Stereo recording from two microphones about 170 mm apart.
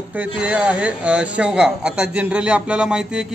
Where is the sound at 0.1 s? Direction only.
10° right (ahead or behind).